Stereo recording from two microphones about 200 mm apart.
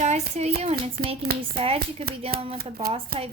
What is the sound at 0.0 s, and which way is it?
A child's voice, 35° right (ahead or behind).